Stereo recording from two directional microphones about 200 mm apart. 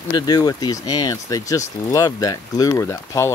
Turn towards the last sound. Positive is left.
turn(degrees=15)  # may be behind; listen again after turning